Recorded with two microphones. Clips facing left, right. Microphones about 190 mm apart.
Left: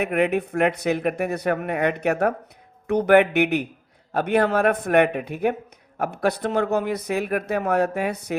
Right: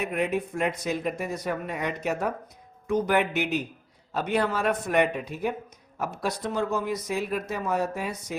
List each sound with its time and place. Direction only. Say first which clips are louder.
0.0 s speech: left 6 dB; 65° left (ahead or behind)